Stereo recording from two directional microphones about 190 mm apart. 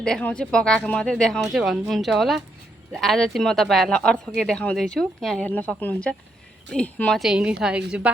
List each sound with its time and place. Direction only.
0.0 s speech: 5° left (ahead or behind)